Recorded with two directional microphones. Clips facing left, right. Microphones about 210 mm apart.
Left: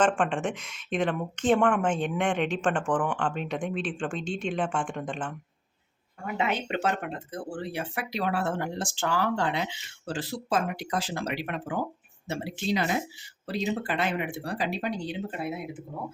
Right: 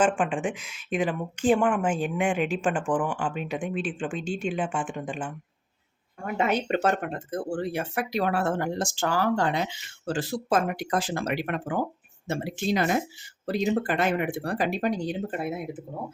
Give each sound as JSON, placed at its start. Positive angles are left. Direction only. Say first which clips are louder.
{"t": 0.0, "sound": "speech", "louder": "right 1 dB", "side_deg": -5}
{"t": 6.3, "sound": "speech", "louder": "right 4 dB", "side_deg": -45}